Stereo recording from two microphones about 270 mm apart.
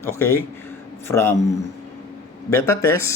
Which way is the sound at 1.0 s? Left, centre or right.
Centre.